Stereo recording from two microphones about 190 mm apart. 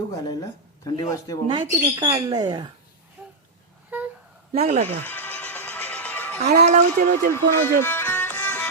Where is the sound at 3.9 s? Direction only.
10° right (ahead or behind).